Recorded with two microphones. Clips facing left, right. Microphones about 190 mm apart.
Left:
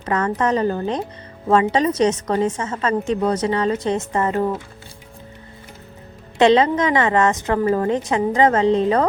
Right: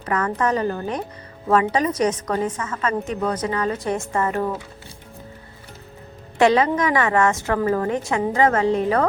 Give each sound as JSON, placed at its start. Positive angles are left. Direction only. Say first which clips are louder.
{"t": 0.0, "sound": "a woman's voice", "louder": "left 2 dB", "side_deg": 30}
{"t": 6.4, "sound": "a woman's voice", "louder": "left 2 dB", "side_deg": 25}